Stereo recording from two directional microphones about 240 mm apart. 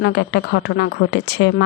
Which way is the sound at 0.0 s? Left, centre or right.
Left.